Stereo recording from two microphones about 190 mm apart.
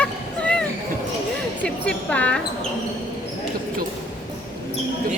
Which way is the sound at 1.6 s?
5° left (ahead or behind).